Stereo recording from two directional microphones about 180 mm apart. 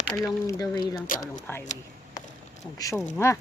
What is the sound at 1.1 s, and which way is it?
Speech, 50° left (ahead or behind).